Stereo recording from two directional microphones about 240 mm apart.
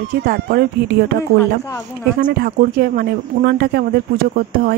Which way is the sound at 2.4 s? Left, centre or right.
Right.